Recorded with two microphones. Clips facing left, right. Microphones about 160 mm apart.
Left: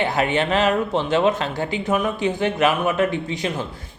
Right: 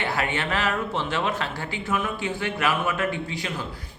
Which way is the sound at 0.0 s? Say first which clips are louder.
Left 6 dB; 20° left (ahead or behind).